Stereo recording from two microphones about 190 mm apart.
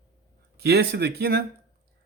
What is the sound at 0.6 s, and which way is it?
Speech, 60° right (ahead or behind).